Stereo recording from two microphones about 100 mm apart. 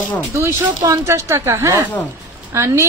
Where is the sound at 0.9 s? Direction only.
30° right (ahead or behind).